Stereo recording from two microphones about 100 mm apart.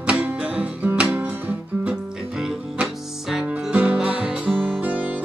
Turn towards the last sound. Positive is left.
turn(degrees=-15)  # may be behind; listen again after turning